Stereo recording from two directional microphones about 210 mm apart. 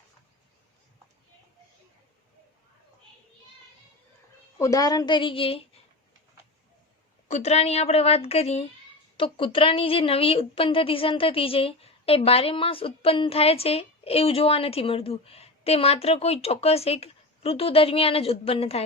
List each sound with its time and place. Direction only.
4.5 s a woman's voice: 15° left (ahead or behind)
7.3 s a woman's voice: 30° left (ahead or behind)